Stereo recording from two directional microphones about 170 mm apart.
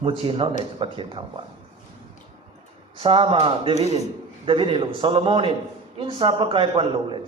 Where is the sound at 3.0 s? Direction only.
30° right (ahead or behind).